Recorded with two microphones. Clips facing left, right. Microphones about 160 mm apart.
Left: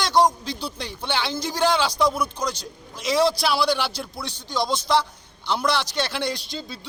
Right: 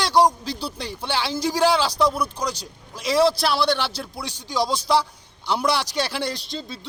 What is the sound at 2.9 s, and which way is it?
A man's voice, 5° right (ahead or behind).